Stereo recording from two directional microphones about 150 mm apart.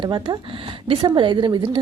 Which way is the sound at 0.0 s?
35° right (ahead or behind).